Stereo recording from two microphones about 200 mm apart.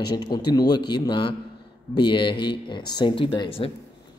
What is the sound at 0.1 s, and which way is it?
Speech, 20° left (ahead or behind).